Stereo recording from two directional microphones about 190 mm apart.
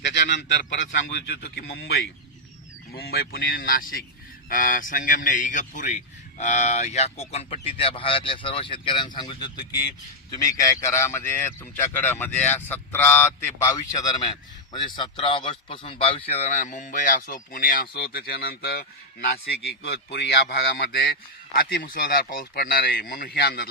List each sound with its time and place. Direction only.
0.0 s a man's voice: 65° left (ahead or behind)